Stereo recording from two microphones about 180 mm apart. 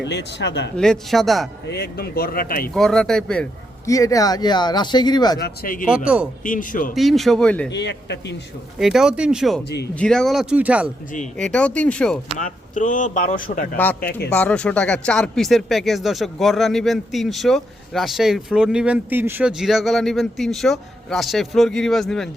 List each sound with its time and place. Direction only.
0.0 s speech: 75° left (ahead or behind)
0.8 s speech: centre (ahead or behind)
1.6 s speech: 65° left (ahead or behind)
2.7 s speech: centre (ahead or behind)
3.8 s speech: 20° left (ahead or behind)
5.4 s speech: 50° left (ahead or behind)
6.9 s speech: centre (ahead or behind)
7.7 s speech: 75° left (ahead or behind)
8.8 s speech: centre (ahead or behind)
9.6 s speech: 65° left (ahead or behind)
9.9 s speech: 5° left (ahead or behind)
11.3 s speech: 5° left (ahead or behind)
12.4 s speech: 45° left (ahead or behind)
13.7 s speech: 10° left (ahead or behind)